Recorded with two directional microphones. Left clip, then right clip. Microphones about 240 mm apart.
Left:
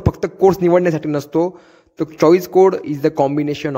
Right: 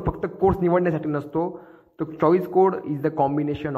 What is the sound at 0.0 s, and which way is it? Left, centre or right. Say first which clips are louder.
A man's voice: left 7 dB; left.